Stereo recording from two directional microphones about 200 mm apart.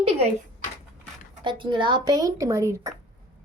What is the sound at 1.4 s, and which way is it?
Speech, 25° right (ahead or behind).